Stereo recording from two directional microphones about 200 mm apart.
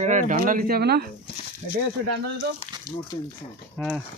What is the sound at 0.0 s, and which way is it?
Speech, 40° right (ahead or behind).